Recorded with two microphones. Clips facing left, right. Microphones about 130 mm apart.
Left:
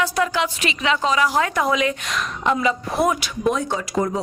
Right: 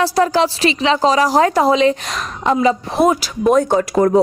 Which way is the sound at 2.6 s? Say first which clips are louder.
Right 8 dB; 25° right (ahead or behind).